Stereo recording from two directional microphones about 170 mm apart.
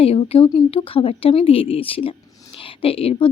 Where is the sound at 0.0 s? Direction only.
35° left (ahead or behind).